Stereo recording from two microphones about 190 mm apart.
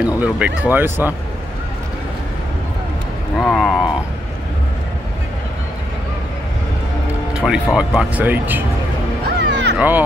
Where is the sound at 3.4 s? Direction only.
Centre (ahead or behind).